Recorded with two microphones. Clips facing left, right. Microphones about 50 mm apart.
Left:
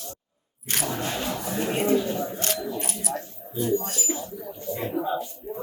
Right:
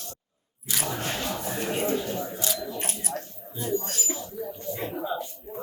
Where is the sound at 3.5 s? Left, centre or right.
Left.